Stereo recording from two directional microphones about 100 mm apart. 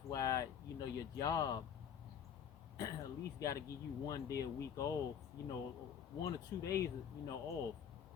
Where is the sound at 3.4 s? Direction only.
35° left (ahead or behind).